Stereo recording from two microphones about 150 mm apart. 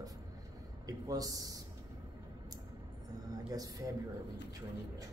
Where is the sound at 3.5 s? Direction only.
25° right (ahead or behind).